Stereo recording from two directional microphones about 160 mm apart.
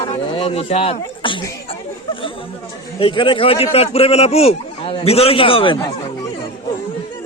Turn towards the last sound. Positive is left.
turn(degrees=30)  # may be behind; listen again after turning